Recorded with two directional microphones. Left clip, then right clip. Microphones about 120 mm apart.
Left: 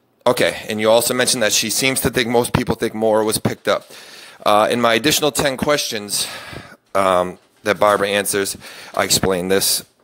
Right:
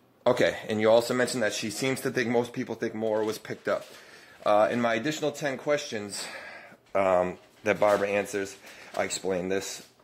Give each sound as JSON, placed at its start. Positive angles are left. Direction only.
{"t": 0.2, "sound": "speech", "side_deg": 25}
{"t": 5.4, "sound": "speech", "side_deg": 40}